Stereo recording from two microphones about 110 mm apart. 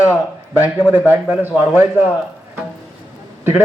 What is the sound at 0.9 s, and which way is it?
Speech, 15° right (ahead or behind).